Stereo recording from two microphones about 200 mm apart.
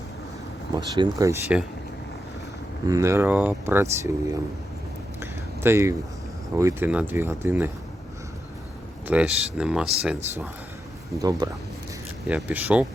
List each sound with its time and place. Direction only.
0.8 s speech: 20° right (ahead or behind)
2.8 s speech: 15° right (ahead or behind)
5.2 s a sound: 10° right (ahead or behind)
6.6 s speech: 15° right (ahead or behind)
9.0 s speech: 5° right (ahead or behind)
11.2 s speech: 15° right (ahead or behind)
12.3 s speech: 5° right (ahead or behind)